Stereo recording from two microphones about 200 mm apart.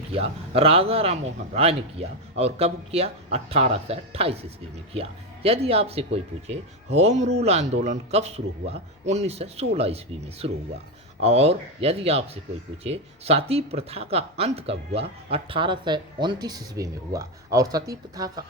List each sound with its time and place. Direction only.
0.1 s speech: 30° right (ahead or behind)